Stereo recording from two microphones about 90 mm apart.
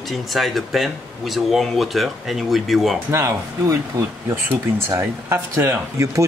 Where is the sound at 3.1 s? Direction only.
35° right (ahead or behind).